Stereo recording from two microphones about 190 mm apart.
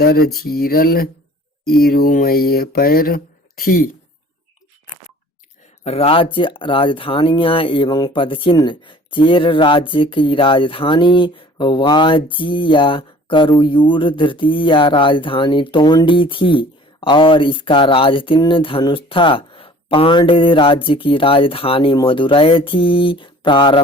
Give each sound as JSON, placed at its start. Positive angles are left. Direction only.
{"t": 0.0, "sound": "speech", "side_deg": 55}
{"t": 5.8, "sound": "speech", "side_deg": 30}